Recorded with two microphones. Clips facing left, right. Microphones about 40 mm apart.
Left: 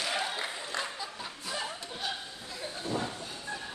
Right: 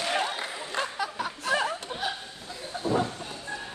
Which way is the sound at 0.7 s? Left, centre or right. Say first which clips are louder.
Right 6 dB; right.